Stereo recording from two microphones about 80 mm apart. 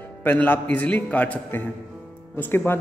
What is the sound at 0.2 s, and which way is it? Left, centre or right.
A man's voice, left.